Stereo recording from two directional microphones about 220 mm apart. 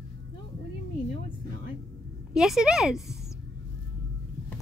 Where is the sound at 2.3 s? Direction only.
Centre (ahead or behind).